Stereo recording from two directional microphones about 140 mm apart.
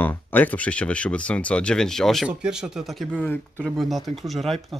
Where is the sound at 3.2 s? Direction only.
10° left (ahead or behind).